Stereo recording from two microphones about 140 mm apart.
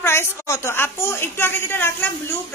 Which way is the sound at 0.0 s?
20° left (ahead or behind).